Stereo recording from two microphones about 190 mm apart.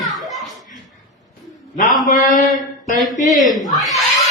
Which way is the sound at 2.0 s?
45° left (ahead or behind).